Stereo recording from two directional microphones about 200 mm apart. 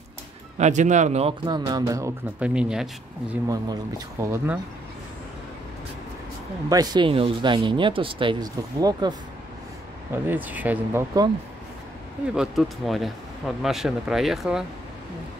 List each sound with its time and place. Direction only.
0.6 s speech: 35° right (ahead or behind); by 2.5 s 15° right (ahead or behind)
2.5 s speech: 5° right (ahead or behind)
3.4 s speech: 20° right (ahead or behind)
6.7 s speech: 20° right (ahead or behind)
10.1 s speech: 10° right (ahead or behind)
12.4 s speech: centre (ahead or behind)